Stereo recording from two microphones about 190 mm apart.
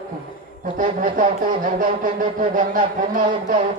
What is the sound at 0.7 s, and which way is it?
Speech, 45° right (ahead or behind).